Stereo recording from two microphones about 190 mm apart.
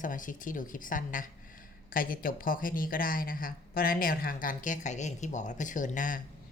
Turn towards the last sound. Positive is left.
turn(degrees=45)  # may be behind; listen again after turning